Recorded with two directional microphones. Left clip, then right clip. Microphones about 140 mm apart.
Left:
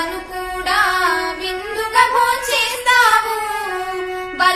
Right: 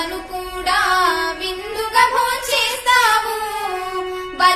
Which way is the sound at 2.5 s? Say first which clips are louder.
Left 1 dB; 20° left (ahead or behind).